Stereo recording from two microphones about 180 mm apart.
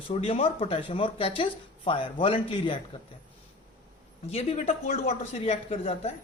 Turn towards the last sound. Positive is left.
turn(degrees=35)  # may be behind; listen again after turning